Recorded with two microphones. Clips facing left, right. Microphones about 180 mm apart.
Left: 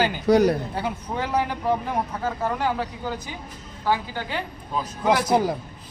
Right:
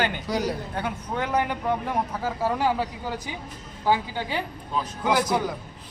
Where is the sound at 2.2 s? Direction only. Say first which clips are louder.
Even; 5° right (ahead or behind).